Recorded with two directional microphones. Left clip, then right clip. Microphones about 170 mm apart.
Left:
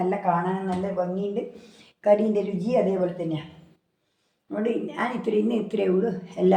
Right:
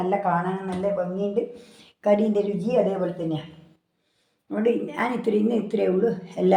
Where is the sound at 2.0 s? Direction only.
35° right (ahead or behind).